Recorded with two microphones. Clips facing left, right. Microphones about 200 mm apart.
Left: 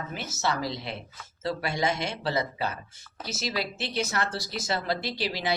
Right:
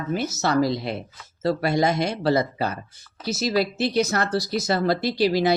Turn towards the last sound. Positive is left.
turn(degrees=-40)  # may be behind; listen again after turning